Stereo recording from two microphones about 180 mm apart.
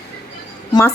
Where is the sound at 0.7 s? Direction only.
20° left (ahead or behind).